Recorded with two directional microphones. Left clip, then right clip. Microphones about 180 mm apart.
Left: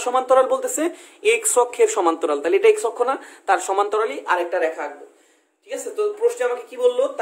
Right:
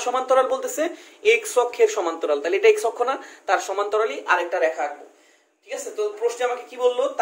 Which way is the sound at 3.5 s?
40° left (ahead or behind).